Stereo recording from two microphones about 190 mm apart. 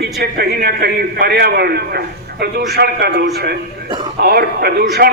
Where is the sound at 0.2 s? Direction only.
55° right (ahead or behind).